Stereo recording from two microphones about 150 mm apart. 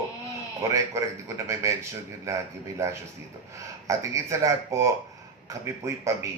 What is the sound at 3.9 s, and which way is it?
A man's voice, 20° right (ahead or behind).